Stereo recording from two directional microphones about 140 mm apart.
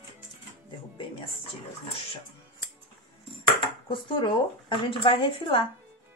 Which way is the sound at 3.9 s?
35° left (ahead or behind).